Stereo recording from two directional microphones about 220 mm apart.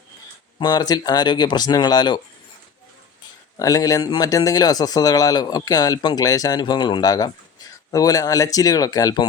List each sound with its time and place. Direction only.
0.6 s speech: 20° left (ahead or behind)
3.6 s speech: 15° left (ahead or behind)